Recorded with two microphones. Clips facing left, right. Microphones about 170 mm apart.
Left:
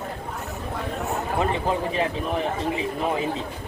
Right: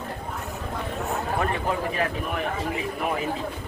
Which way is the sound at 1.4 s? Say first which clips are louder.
Left 4 dB; 20° left (ahead or behind).